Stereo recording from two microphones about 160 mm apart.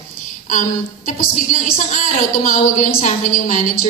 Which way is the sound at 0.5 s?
55° left (ahead or behind).